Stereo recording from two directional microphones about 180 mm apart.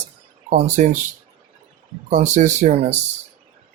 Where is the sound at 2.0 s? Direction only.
40° right (ahead or behind).